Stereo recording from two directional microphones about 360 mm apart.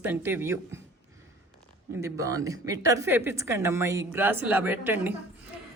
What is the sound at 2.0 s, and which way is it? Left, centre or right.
A woman's voice, centre.